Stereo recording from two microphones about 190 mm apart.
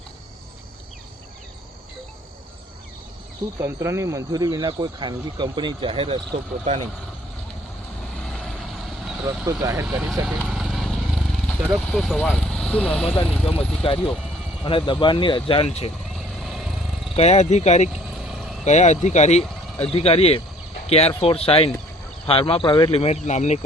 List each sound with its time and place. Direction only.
3.6 s speech: 15° right (ahead or behind)
8.2 s vehicle: centre (ahead or behind)
9.5 s speech: 15° right (ahead or behind)
10.2 s vehicle: centre (ahead or behind)
11.9 s speech: centre (ahead or behind)
13.5 s speech: 30° left (ahead or behind)
16.1 s vehicle: centre (ahead or behind)
17.2 s speech: 35° left (ahead or behind)
18.3 s vehicle: centre (ahead or behind)
18.6 s speech: 35° left (ahead or behind)